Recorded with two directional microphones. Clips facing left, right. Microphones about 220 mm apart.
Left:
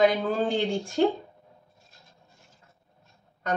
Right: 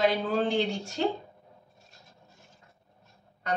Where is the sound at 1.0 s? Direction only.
50° left (ahead or behind).